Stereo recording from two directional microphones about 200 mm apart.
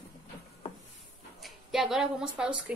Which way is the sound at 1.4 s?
Centre (ahead or behind).